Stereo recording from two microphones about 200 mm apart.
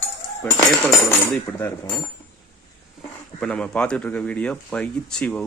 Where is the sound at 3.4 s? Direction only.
5° left (ahead or behind).